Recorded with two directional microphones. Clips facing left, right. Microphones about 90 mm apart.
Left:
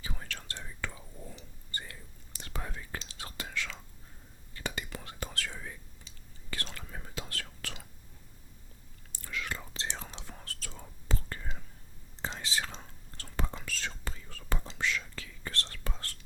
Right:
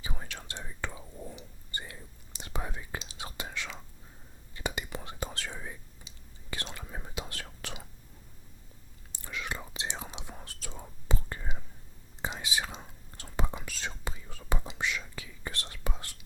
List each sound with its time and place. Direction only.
0.0 s whispering: 15° right (ahead or behind)
9.1 s whispering: 20° right (ahead or behind)